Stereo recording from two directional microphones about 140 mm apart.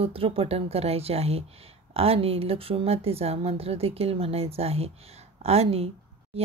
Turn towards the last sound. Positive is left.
turn(degrees=-45)  # may be behind; listen again after turning